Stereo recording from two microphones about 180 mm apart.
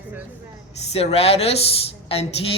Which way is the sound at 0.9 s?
35° left (ahead or behind).